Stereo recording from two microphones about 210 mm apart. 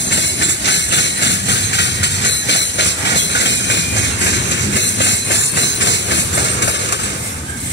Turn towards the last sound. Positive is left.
turn(degrees=55)  # may be behind; listen again after turning